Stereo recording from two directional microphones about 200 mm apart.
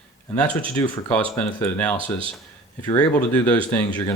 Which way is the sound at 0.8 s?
10° left (ahead or behind).